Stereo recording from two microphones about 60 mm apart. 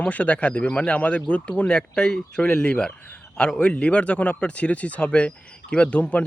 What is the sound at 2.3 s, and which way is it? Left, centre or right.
A man's voice, left.